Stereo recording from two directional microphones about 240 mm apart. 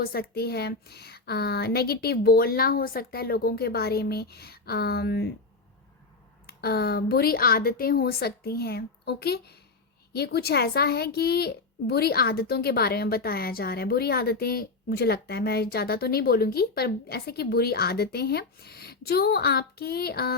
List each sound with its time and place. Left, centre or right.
0.0 s a child's voice: left
6.5 s a child's voice: left